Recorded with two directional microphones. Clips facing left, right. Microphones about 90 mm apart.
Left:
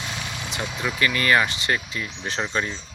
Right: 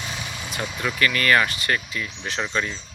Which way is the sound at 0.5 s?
15° left (ahead or behind).